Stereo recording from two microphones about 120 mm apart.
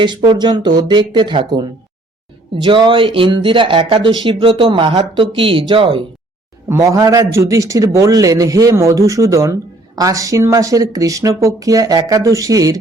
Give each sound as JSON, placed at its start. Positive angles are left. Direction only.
{"t": 0.0, "sound": "speech", "side_deg": -40}
{"t": 6.7, "sound": "a man's voice", "side_deg": -25}